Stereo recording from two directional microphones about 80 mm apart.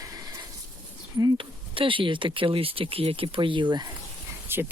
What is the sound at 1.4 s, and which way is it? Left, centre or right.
Speech, right.